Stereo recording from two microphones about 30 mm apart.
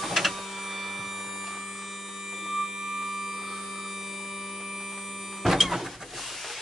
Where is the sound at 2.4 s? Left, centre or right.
Centre.